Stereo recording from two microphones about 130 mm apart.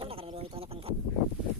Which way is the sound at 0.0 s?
45° right (ahead or behind).